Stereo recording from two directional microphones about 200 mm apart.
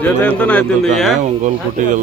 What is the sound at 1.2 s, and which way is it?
Speech, 40° right (ahead or behind).